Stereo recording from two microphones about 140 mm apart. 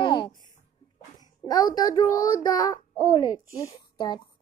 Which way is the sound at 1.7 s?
30° left (ahead or behind).